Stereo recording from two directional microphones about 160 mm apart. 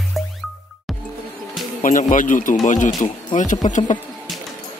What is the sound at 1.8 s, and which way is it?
Speech, 50° left (ahead or behind).